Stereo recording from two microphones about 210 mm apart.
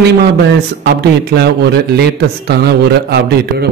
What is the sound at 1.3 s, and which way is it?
A man's voice, 55° right (ahead or behind).